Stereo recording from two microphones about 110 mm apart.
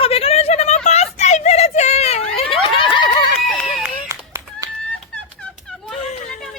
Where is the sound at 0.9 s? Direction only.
90° left.